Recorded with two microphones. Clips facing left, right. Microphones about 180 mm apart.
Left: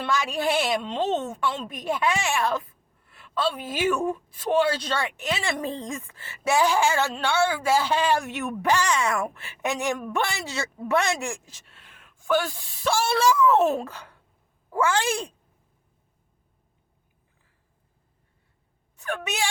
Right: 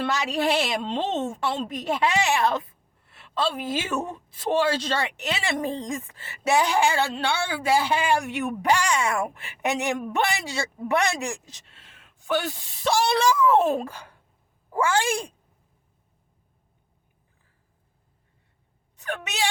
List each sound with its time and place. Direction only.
0.1 s a woman's voice: 20° right (ahead or behind)